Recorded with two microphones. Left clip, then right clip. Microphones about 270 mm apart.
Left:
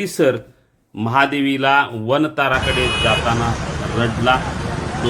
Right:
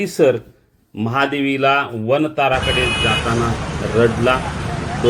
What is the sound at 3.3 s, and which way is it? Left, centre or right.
Speech, centre.